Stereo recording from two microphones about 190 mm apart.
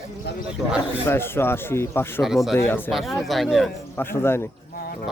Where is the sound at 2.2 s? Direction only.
Centre (ahead or behind).